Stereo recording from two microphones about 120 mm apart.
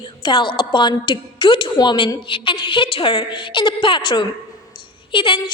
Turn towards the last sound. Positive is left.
turn(degrees=45)  # may be behind; listen again after turning